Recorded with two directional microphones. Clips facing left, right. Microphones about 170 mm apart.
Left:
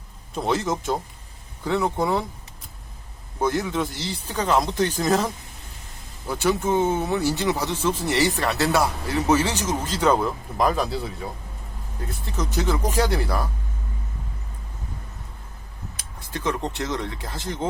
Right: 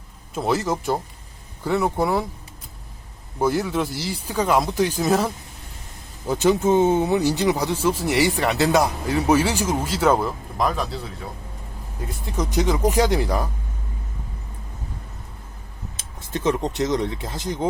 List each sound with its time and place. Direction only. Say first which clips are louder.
0.3 s a man's voice: right 1 dB; 5° right (ahead or behind)
3.3 s speech: right 2 dB; 10° right (ahead or behind)
12.2 s speech: right 3 dB; 15° right (ahead or behind)
16.0 s speech: right 5 dB; 20° right (ahead or behind)